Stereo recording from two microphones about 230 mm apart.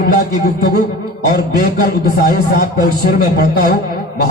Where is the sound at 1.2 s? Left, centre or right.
Left.